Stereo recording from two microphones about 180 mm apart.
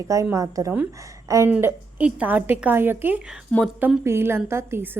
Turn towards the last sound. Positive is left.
turn(degrees=-10)  # may be behind; listen again after turning